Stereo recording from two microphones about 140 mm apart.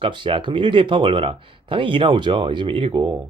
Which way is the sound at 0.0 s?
35° right (ahead or behind).